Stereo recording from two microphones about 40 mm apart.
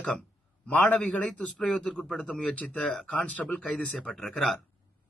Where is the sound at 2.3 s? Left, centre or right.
Centre.